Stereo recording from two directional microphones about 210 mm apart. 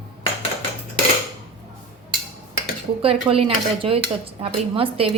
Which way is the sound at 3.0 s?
25° right (ahead or behind).